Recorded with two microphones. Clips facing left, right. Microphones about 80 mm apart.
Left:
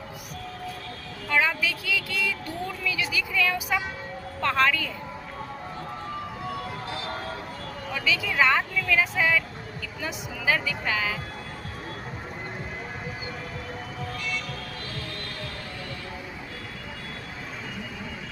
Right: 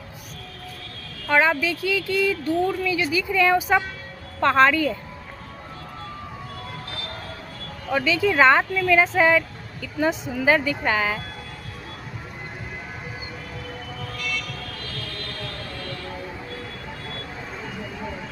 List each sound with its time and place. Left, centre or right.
1.3 s speech: right
7.9 s speech: right
14.2 s music: left